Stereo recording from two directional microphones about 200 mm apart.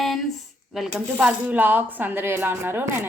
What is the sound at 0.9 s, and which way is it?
Speech, 5° right (ahead or behind).